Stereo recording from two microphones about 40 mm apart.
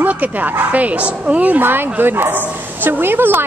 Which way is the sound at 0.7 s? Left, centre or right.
Right.